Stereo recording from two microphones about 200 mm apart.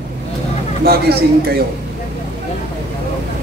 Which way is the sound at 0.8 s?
50° right (ahead or behind).